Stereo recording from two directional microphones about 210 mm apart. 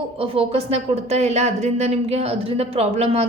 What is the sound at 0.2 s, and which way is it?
A woman's voice, 30° right (ahead or behind).